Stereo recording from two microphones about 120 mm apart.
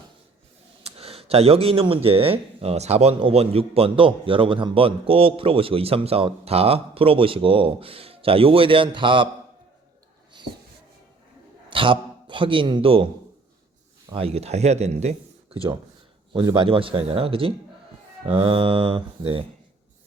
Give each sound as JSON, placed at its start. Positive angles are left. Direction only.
{"t": 0.9, "sound": "speech", "side_deg": -55}
{"t": 3.2, "sound": "a man's voice", "side_deg": -55}
{"t": 11.7, "sound": "a man's voice", "side_deg": -45}
{"t": 14.1, "sound": "a man's voice", "side_deg": -55}
{"t": 16.6, "sound": "a man's voice", "side_deg": -45}